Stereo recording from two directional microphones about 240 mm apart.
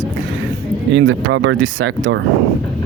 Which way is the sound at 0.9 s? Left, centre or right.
Right.